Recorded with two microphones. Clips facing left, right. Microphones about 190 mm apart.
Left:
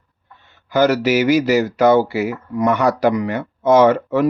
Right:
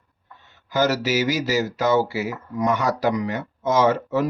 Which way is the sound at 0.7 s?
60° left (ahead or behind).